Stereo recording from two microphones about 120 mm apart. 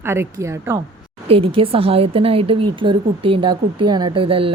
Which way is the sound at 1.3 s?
50° right (ahead or behind).